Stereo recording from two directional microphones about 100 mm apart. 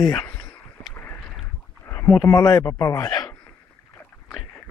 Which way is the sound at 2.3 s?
35° left (ahead or behind).